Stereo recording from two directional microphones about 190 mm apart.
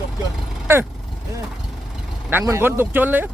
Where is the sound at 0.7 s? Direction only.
15° right (ahead or behind).